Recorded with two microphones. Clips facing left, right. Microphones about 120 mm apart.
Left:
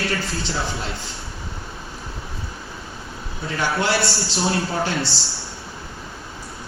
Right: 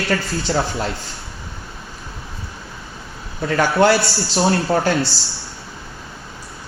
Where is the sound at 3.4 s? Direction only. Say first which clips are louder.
Right 8 dB; 55° right (ahead or behind).